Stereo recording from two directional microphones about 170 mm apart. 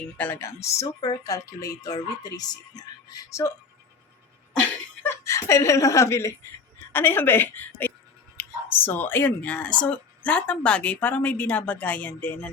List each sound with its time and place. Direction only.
0.0 s a woman's voice: 10° left (ahead or behind)
5.0 s speech: 15° left (ahead or behind)